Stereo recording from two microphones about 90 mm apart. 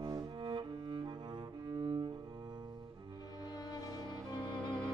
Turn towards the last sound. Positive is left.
turn(degrees=10)  # may be behind; listen again after turning